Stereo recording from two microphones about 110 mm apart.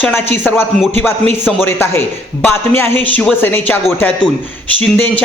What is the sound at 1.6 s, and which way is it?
A man's voice, 20° left (ahead or behind).